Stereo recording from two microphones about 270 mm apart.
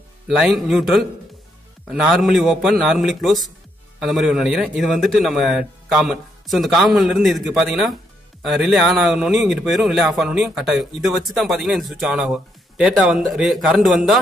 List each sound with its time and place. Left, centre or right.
0.3 s a man's voice: centre